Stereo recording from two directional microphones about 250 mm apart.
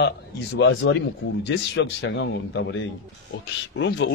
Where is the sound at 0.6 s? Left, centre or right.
Left.